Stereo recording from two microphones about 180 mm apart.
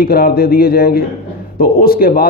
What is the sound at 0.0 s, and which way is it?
A man's voice, 55° left (ahead or behind).